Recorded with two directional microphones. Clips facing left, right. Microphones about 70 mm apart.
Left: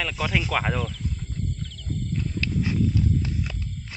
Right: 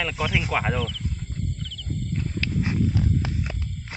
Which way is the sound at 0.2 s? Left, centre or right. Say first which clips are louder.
Even; centre.